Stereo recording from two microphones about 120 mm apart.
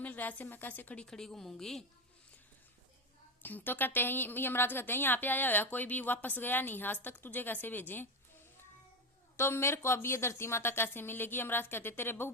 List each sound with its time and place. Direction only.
0.0 s a woman's voice: 15° left (ahead or behind)
3.4 s a woman's voice: 15° left (ahead or behind)
9.4 s a woman's voice: 20° left (ahead or behind)